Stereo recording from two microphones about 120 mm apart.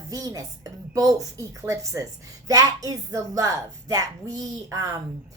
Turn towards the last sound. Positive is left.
turn(degrees=-25)  # may be behind; listen again after turning